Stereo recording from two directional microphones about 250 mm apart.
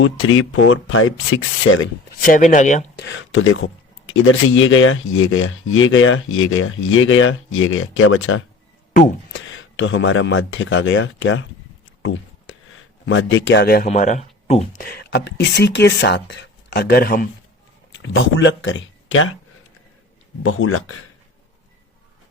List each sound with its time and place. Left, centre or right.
0.0 s speech: left
2.1 s speech: left
3.0 s speech: left
8.9 s speech: left
9.3 s speech: left
12.7 s speech: left
17.9 s speech: left
20.4 s speech: left